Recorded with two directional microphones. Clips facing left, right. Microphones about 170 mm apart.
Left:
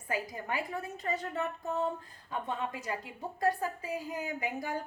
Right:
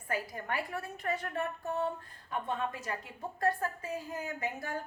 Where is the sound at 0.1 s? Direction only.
15° left (ahead or behind).